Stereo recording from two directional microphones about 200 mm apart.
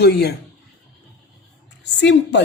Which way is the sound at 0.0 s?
50° left (ahead or behind).